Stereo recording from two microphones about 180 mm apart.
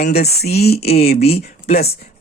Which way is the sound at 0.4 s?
60° left (ahead or behind).